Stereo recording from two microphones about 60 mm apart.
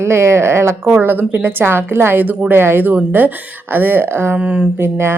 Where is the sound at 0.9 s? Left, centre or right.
Right.